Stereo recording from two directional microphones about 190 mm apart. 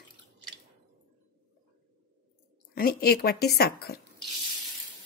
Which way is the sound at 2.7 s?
55° left (ahead or behind).